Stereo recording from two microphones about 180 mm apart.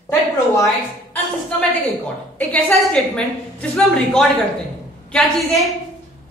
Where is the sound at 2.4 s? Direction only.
5° left (ahead or behind).